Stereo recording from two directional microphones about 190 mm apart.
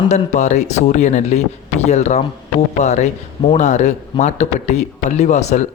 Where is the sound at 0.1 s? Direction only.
40° left (ahead or behind).